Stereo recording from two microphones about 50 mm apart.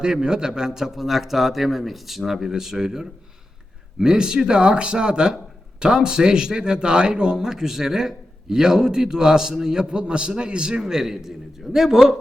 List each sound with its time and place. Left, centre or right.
0.0 s a man's voice: centre